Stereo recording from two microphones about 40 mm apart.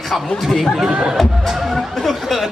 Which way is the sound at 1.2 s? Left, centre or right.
Centre.